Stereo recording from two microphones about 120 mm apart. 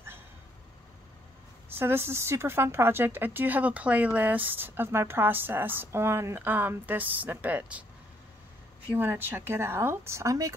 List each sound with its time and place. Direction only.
1.8 s speech: 20° right (ahead or behind)
8.9 s speech: 20° right (ahead or behind)